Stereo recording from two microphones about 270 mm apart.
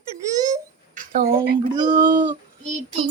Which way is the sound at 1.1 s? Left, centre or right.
Right.